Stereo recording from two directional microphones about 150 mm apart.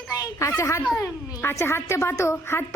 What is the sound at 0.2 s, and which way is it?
A woman's voice, 20° left (ahead or behind).